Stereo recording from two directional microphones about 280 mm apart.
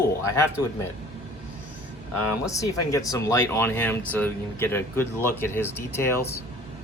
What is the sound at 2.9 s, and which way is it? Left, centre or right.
A man's voice, centre.